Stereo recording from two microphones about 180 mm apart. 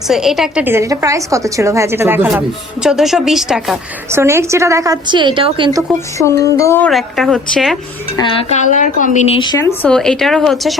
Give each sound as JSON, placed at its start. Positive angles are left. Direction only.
{"t": 0.1, "sound": "a woman's voice", "side_deg": 0}
{"t": 4.1, "sound": "a woman's voice", "side_deg": -15}
{"t": 6.1, "sound": "speech", "side_deg": 15}
{"t": 6.9, "sound": "a woman's voice", "side_deg": 0}
{"t": 8.1, "sound": "speech", "side_deg": 30}
{"t": 9.4, "sound": "speech", "side_deg": 20}
{"t": 9.9, "sound": "a woman's voice", "side_deg": 5}